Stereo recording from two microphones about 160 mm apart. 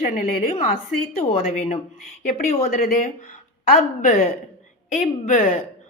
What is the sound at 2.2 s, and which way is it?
Speech, 55° left (ahead or behind).